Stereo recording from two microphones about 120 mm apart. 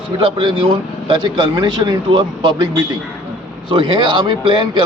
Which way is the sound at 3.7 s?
45° right (ahead or behind).